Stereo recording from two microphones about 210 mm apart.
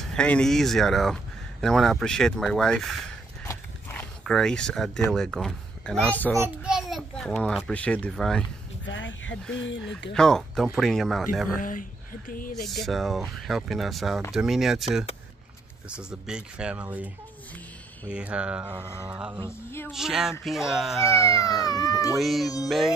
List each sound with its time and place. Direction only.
0.1 s speech: 5° left (ahead or behind)
6.3 s a child's voice: 10° right (ahead or behind)
8.8 s speech: 60° left (ahead or behind)
10.1 s speech: centre (ahead or behind)
11.6 s a woman's voice: 40° left (ahead or behind)
12.6 s speech: centre (ahead or behind)
18.1 s speech: 5° right (ahead or behind)
21.5 s speech: 20° left (ahead or behind)
22.2 s speech: centre (ahead or behind)